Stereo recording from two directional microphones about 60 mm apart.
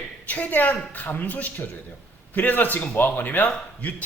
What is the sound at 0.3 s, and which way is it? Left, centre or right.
A man's voice, left.